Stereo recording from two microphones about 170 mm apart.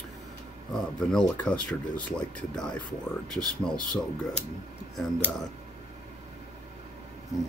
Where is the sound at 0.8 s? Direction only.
5° left (ahead or behind).